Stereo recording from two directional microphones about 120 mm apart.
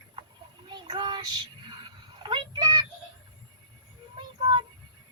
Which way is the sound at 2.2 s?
35° right (ahead or behind).